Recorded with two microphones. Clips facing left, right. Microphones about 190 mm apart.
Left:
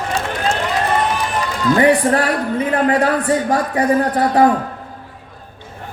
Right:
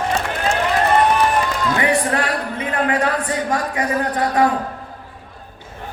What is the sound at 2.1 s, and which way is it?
Speech, 35° left (ahead or behind).